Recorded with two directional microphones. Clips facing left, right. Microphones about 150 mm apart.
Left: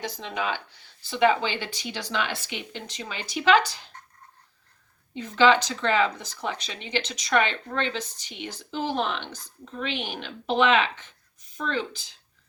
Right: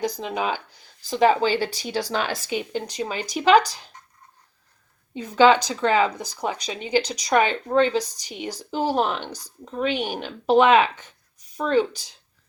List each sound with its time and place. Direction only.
0.0 s speech: 40° right (ahead or behind)
5.2 s speech: 40° right (ahead or behind)